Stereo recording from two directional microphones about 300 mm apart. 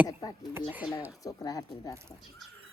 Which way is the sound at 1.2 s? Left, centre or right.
Centre.